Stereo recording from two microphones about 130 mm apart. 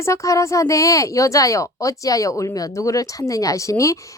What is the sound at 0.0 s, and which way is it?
A woman's voice, 20° left (ahead or behind).